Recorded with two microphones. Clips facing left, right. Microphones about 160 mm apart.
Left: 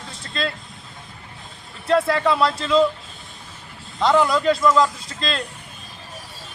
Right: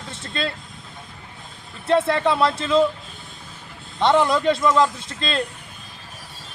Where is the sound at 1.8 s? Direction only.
25° right (ahead or behind).